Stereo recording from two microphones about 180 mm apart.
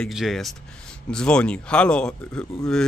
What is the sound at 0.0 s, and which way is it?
Speech, centre (ahead or behind).